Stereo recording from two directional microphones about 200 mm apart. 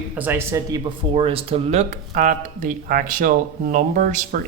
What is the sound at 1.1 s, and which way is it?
Speech, 30° right (ahead or behind).